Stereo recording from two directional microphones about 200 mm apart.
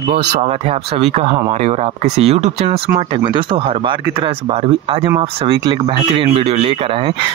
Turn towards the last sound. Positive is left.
turn(degrees=-30)  # may be behind; listen again after turning